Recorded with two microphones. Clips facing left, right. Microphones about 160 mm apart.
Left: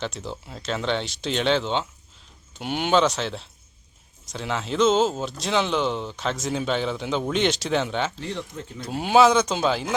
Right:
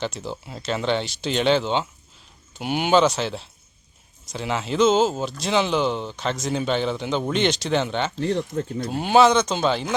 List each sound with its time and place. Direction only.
0.0 s speech: centre (ahead or behind)
8.2 s speech: 50° right (ahead or behind)
8.9 s speech: centre (ahead or behind)